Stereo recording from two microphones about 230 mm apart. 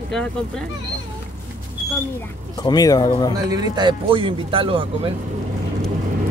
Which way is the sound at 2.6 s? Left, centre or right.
Centre.